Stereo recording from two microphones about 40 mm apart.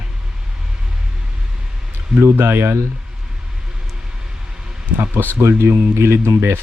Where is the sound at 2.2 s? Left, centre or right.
Right.